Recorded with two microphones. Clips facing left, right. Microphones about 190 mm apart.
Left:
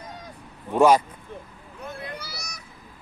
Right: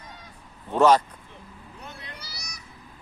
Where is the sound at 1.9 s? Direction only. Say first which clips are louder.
Left 7 dB; 55° left (ahead or behind).